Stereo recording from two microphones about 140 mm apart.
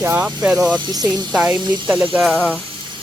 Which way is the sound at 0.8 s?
30° right (ahead or behind).